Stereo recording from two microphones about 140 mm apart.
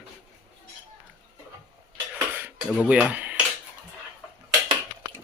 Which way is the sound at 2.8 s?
5° right (ahead or behind).